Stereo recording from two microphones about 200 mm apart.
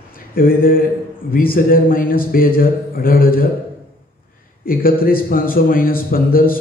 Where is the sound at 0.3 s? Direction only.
45° left (ahead or behind).